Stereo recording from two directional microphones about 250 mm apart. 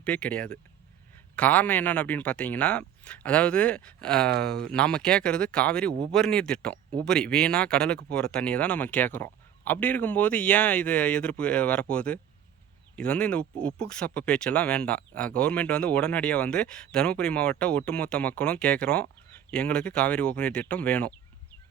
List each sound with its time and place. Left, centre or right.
0.0 s speech: centre
4.3 s speech: right
4.6 s speech: centre